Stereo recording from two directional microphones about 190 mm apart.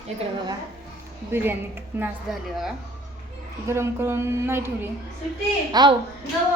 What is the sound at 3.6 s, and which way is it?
A woman's voice, 15° right (ahead or behind).